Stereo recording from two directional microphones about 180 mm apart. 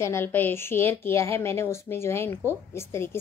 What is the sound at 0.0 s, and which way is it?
A woman's voice, 15° left (ahead or behind).